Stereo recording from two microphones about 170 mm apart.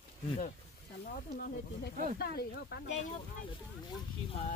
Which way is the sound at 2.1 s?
70° left (ahead or behind).